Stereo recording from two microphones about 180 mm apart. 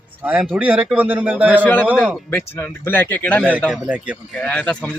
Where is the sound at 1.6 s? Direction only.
10° left (ahead or behind).